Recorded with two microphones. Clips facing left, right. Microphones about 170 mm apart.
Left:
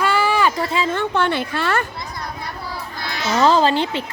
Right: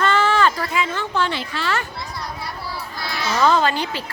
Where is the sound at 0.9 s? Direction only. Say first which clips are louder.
Left 4 dB; 55° left (ahead or behind).